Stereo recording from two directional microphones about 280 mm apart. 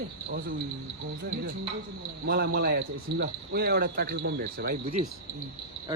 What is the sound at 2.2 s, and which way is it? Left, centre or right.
Speech, right.